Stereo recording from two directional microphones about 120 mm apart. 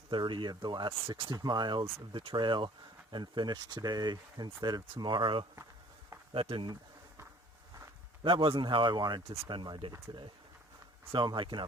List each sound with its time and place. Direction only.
0.1 s speech: 40° right (ahead or behind)
8.2 s speech: 45° right (ahead or behind)
11.1 s speech: 40° right (ahead or behind)